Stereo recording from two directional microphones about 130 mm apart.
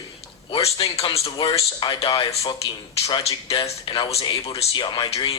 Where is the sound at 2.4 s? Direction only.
35° left (ahead or behind).